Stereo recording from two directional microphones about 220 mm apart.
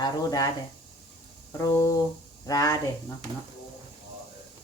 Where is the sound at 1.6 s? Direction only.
15° left (ahead or behind).